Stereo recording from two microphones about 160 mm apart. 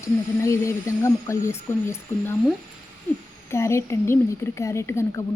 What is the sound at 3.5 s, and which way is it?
A woman's voice, 15° left (ahead or behind).